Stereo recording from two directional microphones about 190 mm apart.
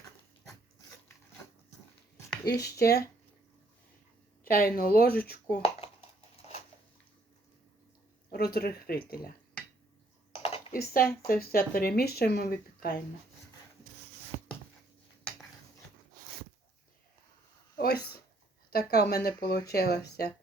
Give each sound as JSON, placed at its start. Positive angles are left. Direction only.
{"t": 2.5, "sound": "speech", "side_deg": 55}
{"t": 4.4, "sound": "speech", "side_deg": 50}
{"t": 8.5, "sound": "speech", "side_deg": 55}
{"t": 10.3, "sound": "computer keyboard", "side_deg": 30}
{"t": 10.7, "sound": "speech", "side_deg": 50}
{"t": 14.3, "sound": "a sound", "side_deg": -30}
{"t": 17.7, "sound": "a sound", "side_deg": 55}
{"t": 18.7, "sound": "speech", "side_deg": 60}